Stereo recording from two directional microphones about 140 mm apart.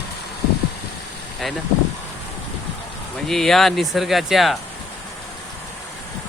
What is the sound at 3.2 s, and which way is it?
Speech, centre (ahead or behind).